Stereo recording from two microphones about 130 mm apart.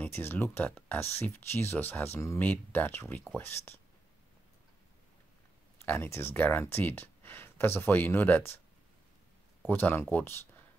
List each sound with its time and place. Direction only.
0.0 s speech: 15° left (ahead or behind)
5.9 s speech: 20° left (ahead or behind)
9.7 s speech: 15° left (ahead or behind)